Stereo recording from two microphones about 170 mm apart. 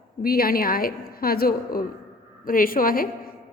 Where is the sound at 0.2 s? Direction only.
60° left (ahead or behind).